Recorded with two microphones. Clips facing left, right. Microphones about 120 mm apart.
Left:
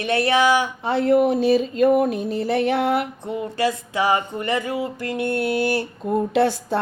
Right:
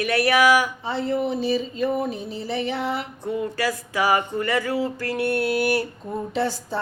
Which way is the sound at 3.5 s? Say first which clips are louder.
Left 3 dB; 25° left (ahead or behind).